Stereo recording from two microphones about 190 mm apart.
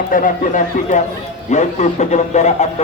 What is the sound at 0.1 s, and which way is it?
Speech, 45° left (ahead or behind).